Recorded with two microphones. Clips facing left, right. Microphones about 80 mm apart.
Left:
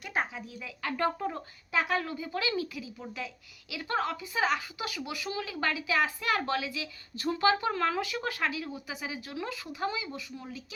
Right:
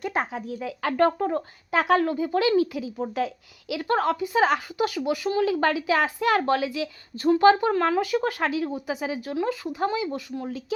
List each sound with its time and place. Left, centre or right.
0.0 s a sound: right
0.3 s speech: right
1.7 s a woman's voice: right
2.0 s speech: right